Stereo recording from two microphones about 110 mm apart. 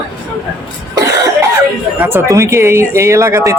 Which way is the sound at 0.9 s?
30° right (ahead or behind).